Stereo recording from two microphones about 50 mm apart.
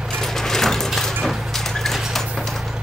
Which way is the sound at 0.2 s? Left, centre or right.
Centre.